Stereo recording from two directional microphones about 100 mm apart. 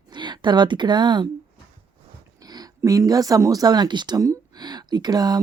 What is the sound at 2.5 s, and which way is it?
Speech, 40° right (ahead or behind).